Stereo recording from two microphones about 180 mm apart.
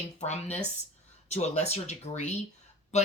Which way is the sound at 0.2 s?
40° left (ahead or behind).